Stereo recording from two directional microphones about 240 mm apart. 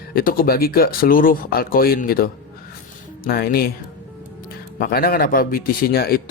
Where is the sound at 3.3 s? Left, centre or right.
Left.